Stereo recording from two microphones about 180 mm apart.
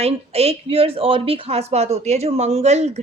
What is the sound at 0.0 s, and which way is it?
A woman's voice, 35° right (ahead or behind).